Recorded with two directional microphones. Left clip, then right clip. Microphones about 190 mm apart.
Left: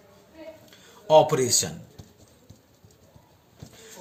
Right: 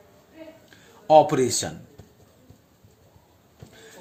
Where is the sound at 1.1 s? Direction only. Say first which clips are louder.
Right 2 dB; 50° right (ahead or behind).